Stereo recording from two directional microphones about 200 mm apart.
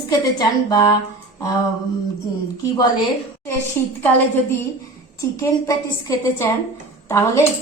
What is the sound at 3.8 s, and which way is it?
Speech, 10° left (ahead or behind).